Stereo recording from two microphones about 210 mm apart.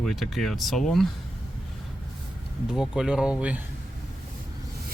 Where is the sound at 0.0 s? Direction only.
Centre (ahead or behind).